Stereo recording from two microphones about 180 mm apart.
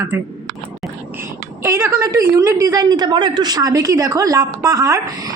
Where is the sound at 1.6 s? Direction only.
15° right (ahead or behind).